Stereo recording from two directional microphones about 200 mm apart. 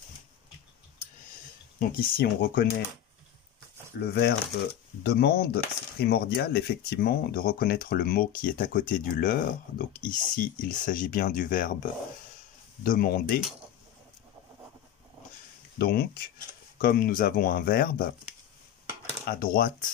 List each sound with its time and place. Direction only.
1.8 s dishes: 50° left (ahead or behind)
4.0 s speech: 55° left (ahead or behind)
5.0 s dishes: 50° left (ahead or behind)
15.8 s dishes: 50° left (ahead or behind)
19.2 s dishes: 45° left (ahead or behind)